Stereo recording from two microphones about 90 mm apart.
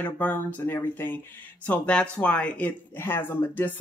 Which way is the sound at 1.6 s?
10° left (ahead or behind).